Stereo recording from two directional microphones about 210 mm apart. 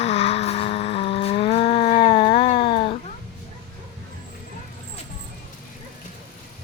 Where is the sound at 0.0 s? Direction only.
30° left (ahead or behind).